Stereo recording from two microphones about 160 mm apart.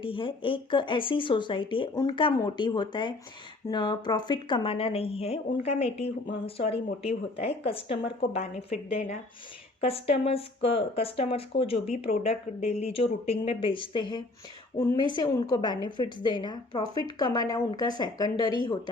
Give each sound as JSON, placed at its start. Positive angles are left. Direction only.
{"t": 0.0, "sound": "a woman's voice", "side_deg": 35}